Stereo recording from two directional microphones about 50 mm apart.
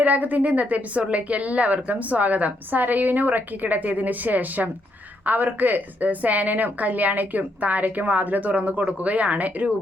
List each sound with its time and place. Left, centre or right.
0.0 s a woman's voice: right